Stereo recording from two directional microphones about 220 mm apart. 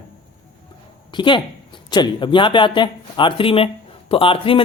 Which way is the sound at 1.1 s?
20° left (ahead or behind).